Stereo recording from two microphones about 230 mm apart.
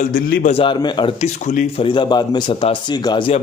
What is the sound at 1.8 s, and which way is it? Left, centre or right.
A man's voice, centre.